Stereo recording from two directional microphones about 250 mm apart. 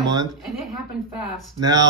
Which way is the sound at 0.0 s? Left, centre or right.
Centre.